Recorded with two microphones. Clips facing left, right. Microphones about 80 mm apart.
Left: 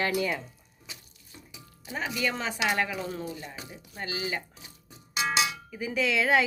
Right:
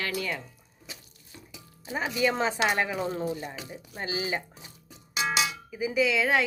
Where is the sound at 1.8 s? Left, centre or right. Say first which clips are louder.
Right 2 dB; right.